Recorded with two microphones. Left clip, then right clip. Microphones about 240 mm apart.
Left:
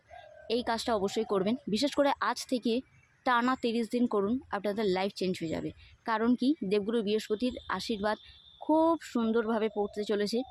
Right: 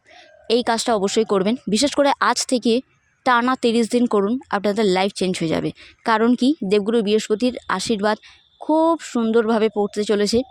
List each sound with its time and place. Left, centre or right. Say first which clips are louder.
0.4 s a woman's voice: right 12 dB; right